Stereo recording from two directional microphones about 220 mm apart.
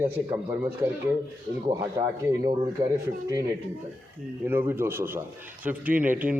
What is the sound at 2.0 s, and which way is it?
Speech, 15° right (ahead or behind).